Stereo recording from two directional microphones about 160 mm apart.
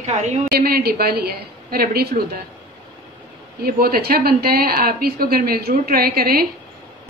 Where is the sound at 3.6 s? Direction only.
70° right (ahead or behind).